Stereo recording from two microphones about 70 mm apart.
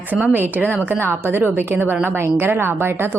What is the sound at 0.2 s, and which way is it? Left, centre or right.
A woman's voice, right.